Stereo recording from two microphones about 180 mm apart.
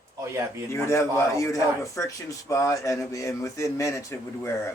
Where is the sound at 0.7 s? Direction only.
15° left (ahead or behind).